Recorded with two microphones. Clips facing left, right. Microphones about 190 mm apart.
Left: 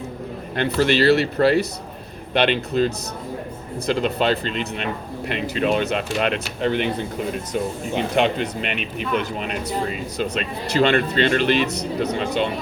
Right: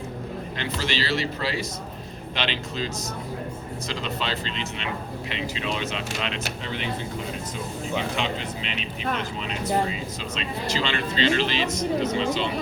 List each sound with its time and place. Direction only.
0.5 s speech: 55° left (ahead or behind)